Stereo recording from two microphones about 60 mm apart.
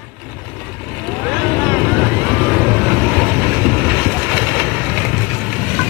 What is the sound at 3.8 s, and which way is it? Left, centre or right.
Boat, centre.